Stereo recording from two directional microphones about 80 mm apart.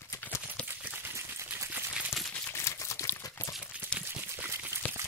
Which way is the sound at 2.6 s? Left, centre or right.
Left.